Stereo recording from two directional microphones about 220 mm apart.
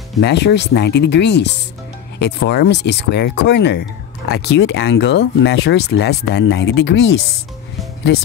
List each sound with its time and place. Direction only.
0.2 s speech: 50° left (ahead or behind)